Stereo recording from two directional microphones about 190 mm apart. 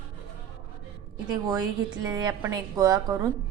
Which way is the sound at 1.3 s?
20° right (ahead or behind).